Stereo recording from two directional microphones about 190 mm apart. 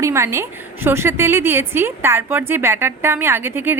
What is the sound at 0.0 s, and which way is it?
A woman's voice, 15° right (ahead or behind).